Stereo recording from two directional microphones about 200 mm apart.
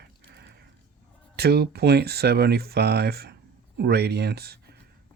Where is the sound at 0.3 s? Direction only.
55° right (ahead or behind).